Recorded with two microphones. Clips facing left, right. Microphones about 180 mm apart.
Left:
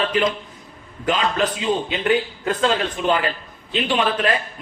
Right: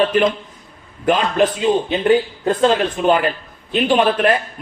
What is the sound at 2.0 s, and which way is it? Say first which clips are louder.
Speech: right 5 dB; 30° right (ahead or behind).